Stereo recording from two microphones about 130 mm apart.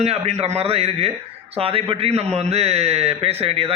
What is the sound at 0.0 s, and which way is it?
A man's voice, 55° right (ahead or behind).